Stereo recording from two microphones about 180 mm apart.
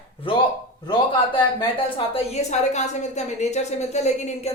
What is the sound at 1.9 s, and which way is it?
A woman's voice, 35° left (ahead or behind).